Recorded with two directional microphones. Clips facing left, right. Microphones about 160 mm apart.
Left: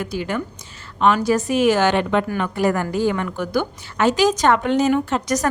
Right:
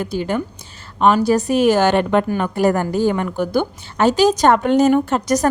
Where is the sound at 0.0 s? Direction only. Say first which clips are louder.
Right 3 dB; 30° right (ahead or behind).